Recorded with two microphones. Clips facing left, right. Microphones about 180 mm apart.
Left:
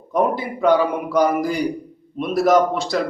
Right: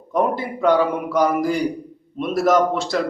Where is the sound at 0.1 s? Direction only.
Centre (ahead or behind).